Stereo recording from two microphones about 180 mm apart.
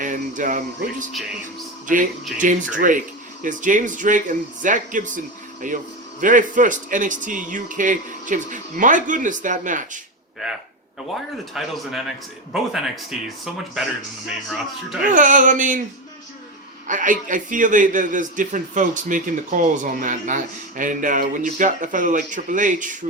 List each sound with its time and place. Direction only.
0.0 s speech: 45° right (ahead or behind)
2.4 s a man's voice: 45° right (ahead or behind)
11.1 s speech: centre (ahead or behind)
15.0 s a man's voice: 45° right (ahead or behind)
16.8 s a man's voice: 45° right (ahead or behind)